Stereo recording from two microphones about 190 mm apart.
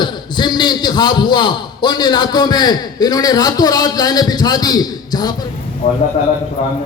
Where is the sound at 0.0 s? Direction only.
25° left (ahead or behind).